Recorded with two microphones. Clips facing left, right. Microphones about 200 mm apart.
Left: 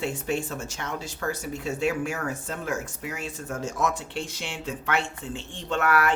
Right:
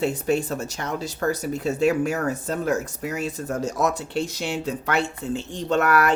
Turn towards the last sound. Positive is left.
turn(degrees=-40)  # may be behind; listen again after turning